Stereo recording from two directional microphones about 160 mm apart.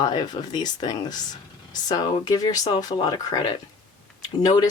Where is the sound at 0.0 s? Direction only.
25° left (ahead or behind).